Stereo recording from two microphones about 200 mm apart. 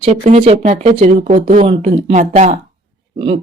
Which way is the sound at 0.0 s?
35° right (ahead or behind).